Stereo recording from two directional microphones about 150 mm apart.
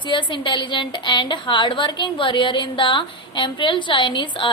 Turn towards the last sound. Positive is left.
turn(degrees=30)  # may be behind; listen again after turning